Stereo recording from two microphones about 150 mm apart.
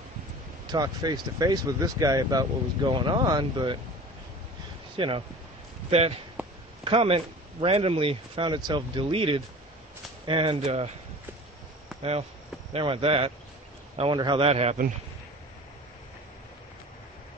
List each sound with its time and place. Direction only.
0.7 s speech: 25° right (ahead or behind)
4.9 s speech: 35° right (ahead or behind)
12.0 s speech: 45° right (ahead or behind)